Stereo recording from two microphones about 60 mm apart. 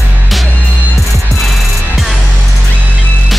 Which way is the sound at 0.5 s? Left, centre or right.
Left.